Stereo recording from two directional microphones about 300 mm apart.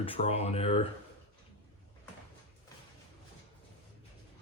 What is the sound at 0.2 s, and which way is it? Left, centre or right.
Speech, left.